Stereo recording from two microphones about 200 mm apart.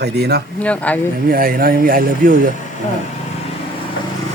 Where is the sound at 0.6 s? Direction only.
5° left (ahead or behind).